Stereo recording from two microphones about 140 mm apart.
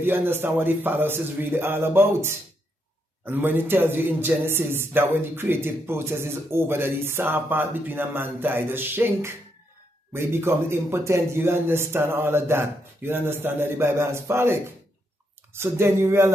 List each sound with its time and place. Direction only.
0.0 s speech: 15° right (ahead or behind)